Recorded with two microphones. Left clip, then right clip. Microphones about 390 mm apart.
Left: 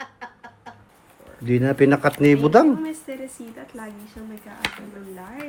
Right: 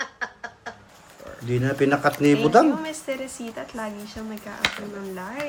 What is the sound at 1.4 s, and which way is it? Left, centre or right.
Speech, centre.